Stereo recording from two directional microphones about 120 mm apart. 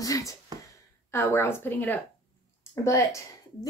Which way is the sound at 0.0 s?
30° left (ahead or behind).